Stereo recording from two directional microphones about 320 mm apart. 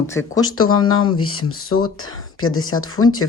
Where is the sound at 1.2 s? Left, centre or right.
Left.